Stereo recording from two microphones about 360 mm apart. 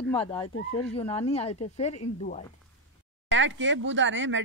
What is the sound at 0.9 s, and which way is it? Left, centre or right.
A woman's voice, centre.